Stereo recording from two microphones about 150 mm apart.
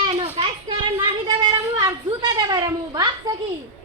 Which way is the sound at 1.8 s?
30° right (ahead or behind).